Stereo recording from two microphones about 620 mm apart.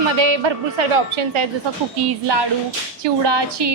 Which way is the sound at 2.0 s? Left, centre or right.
Right.